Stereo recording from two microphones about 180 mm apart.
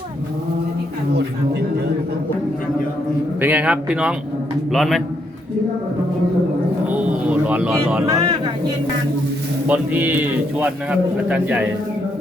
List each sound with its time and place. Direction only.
3.4 s a man's voice: 5° right (ahead or behind)
6.9 s a sound: 5° right (ahead or behind)
8.0 s speech: 20° right (ahead or behind)
9.6 s a man's voice: 10° right (ahead or behind)
11.3 s a man's voice: 10° right (ahead or behind)